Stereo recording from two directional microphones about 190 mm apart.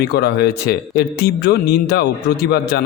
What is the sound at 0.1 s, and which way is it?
A man's voice, 60° left (ahead or behind).